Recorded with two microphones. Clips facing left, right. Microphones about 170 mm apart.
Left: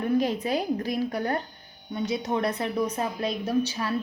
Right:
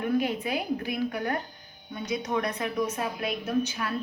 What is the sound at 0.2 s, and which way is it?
A woman's voice, 35° left (ahead or behind).